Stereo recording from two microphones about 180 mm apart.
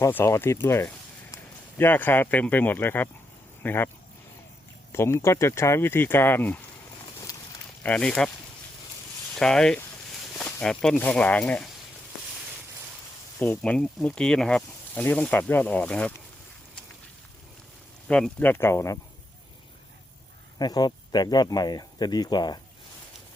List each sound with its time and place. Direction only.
0.0 s speech: 15° left (ahead or behind)
4.9 s speech: 15° left (ahead or behind)
7.0 s boat: 20° left (ahead or behind)
7.9 s speech: 5° left (ahead or behind)
9.3 s speech: 5° left (ahead or behind)
13.4 s speech: 10° left (ahead or behind)
18.1 s speech: 5° left (ahead or behind)
20.6 s speech: 20° left (ahead or behind)